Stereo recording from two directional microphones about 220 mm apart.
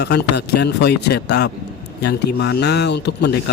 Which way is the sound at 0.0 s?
50° left (ahead or behind).